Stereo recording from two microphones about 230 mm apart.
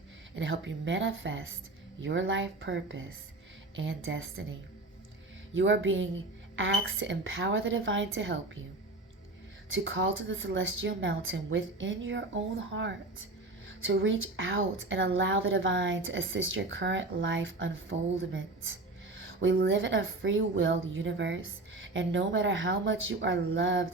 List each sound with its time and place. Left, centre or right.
0.3 s a woman's voice: right
5.5 s a woman's voice: right
9.6 s a woman's voice: right
19.1 s a sound: right
19.5 s a woman's voice: right